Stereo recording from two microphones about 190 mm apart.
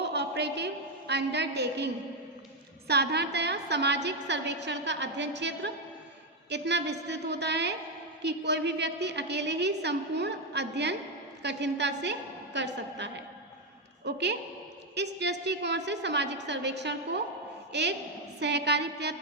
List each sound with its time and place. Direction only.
0.0 s a woman's voice: 60° right (ahead or behind)